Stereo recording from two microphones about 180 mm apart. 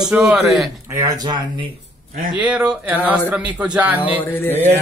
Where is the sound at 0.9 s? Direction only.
20° right (ahead or behind).